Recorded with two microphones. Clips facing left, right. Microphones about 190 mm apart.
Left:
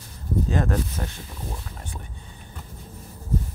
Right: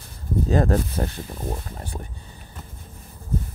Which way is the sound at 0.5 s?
35° right (ahead or behind).